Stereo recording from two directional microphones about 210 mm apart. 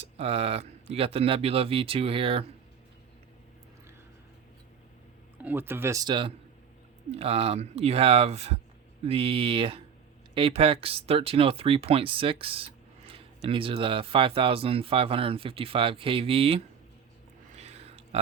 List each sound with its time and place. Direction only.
0.0 s speech: 30° right (ahead or behind)
5.4 s a man's voice: 10° right (ahead or behind); by 16.6 s 25° right (ahead or behind)
17.6 s a sound: 30° right (ahead or behind)